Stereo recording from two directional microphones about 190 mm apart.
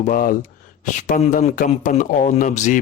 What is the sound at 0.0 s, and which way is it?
Speech, 45° left (ahead or behind).